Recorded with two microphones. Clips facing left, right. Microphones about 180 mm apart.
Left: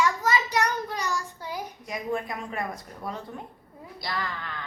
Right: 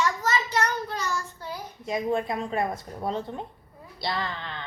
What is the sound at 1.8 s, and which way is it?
Speech, 25° right (ahead or behind).